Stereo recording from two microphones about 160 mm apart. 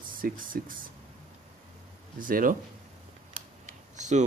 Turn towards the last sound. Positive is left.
turn(degrees=-50)  # may be behind; listen again after turning